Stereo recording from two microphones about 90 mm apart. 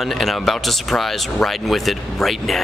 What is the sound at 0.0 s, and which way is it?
Speech, centre (ahead or behind).